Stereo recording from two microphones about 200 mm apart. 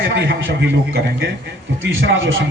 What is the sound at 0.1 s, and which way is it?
Speech, 65° right (ahead or behind).